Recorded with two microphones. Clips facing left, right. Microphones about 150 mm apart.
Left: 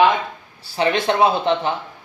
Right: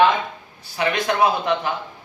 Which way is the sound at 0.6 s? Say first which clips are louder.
Left 3 dB; 30° left (ahead or behind).